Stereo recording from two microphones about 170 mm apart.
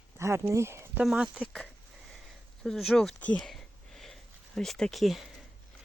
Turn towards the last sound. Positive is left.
turn(degrees=0)  # may be behind; listen again after turning